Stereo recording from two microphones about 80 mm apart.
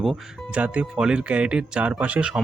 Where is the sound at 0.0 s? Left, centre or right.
Centre.